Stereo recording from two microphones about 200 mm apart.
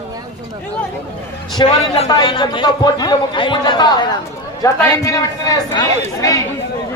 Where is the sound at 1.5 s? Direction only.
20° left (ahead or behind).